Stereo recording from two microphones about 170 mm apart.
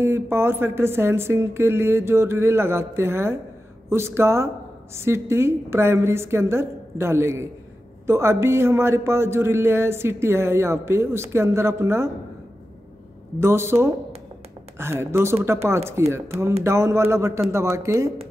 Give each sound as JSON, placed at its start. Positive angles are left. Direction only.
{"t": 0.0, "sound": "a man's voice", "side_deg": -15}
{"t": 13.4, "sound": "a man's voice", "side_deg": -15}